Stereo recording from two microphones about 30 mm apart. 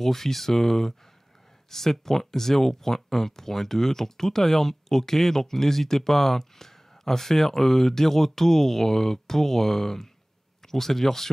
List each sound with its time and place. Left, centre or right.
0.0 s speech: centre